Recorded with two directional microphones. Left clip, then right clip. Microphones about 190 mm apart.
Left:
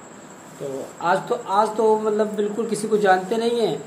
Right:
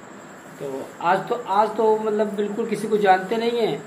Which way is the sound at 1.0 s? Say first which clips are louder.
Even; 15° left (ahead or behind).